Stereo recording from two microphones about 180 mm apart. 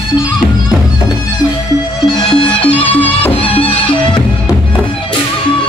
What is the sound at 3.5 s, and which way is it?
Music, 30° left (ahead or behind).